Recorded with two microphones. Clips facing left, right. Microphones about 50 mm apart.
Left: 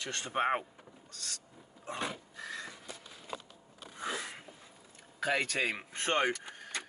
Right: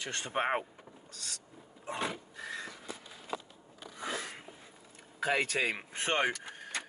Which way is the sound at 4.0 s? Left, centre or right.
Centre.